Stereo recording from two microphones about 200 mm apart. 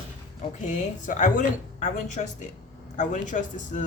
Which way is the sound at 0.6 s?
35° left (ahead or behind).